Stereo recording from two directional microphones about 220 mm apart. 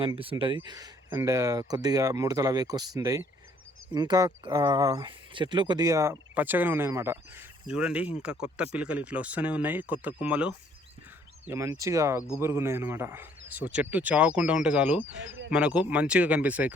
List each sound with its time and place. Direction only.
0.0 s speech: 25° right (ahead or behind); by 16.7 s 5° right (ahead or behind)